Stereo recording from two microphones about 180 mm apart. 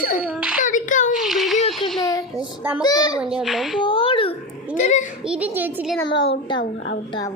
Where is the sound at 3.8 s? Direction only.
30° left (ahead or behind).